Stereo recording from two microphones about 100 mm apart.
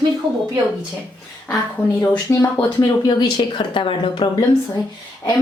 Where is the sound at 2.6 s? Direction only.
45° left (ahead or behind).